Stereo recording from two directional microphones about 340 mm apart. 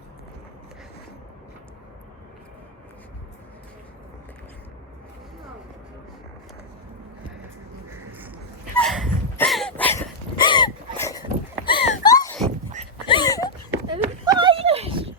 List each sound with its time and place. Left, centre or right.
8.7 s a sound: centre
13.1 s dog: centre
13.7 s clip-clop: centre